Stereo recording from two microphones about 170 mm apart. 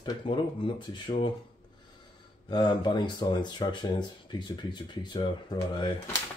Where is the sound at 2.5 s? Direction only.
25° left (ahead or behind).